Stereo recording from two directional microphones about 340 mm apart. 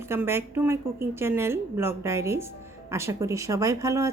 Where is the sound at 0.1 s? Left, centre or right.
Centre.